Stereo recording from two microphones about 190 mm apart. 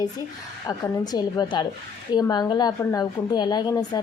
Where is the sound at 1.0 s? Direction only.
20° left (ahead or behind).